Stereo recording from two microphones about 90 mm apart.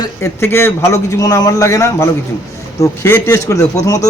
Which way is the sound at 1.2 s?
45° left (ahead or behind).